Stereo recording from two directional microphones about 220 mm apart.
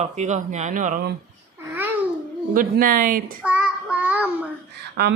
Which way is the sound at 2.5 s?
40° right (ahead or behind).